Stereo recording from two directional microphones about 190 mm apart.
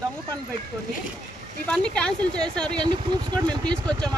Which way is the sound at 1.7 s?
5° left (ahead or behind).